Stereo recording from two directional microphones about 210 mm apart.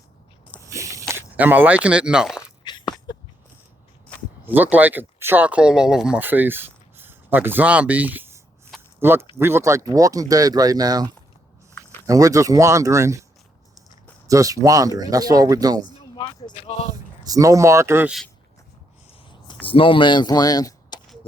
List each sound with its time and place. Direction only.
0.7 s a sound: 15° right (ahead or behind)
1.4 s speech: 10° right (ahead or behind)
2.7 s a sound: 20° left (ahead or behind)
4.4 s speech: 10° right (ahead or behind)
14.3 s speech: 15° right (ahead or behind)
16.2 s speech: 25° left (ahead or behind)
17.2 s speech: 15° right (ahead or behind)
19.6 s speech: 25° left (ahead or behind)